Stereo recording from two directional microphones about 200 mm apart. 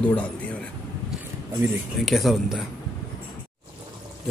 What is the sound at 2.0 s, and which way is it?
Speech, centre (ahead or behind).